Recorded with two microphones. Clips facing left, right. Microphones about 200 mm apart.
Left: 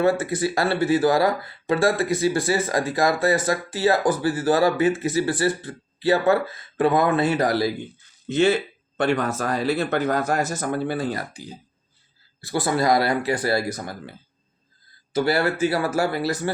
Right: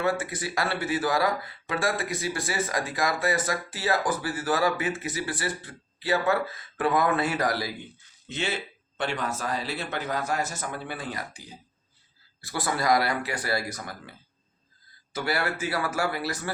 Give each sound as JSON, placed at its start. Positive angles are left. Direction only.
{"t": 0.0, "sound": "speech", "side_deg": 30}
{"t": 8.3, "sound": "speech", "side_deg": 45}
{"t": 12.4, "sound": "speech", "side_deg": 25}